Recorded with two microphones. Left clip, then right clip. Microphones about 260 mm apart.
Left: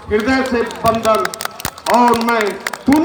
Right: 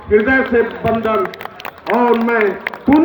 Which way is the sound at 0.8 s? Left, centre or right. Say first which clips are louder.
Left 2 dB; left.